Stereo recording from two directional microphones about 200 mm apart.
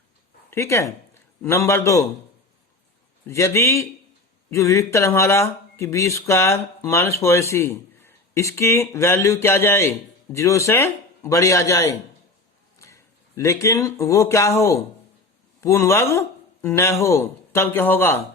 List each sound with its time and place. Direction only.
0.5 s speech: 15° left (ahead or behind)
3.2 s speech: 15° left (ahead or behind)